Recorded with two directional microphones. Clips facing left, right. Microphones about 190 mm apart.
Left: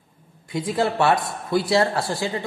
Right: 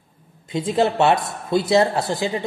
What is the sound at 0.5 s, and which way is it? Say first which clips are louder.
A man's voice: right 3 dB; 20° right (ahead or behind).